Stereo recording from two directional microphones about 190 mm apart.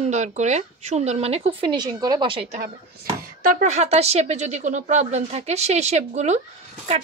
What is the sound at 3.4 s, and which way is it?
A child's voice, 40° right (ahead or behind).